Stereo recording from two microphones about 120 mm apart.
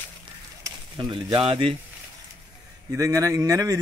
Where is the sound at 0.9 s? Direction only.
40° right (ahead or behind).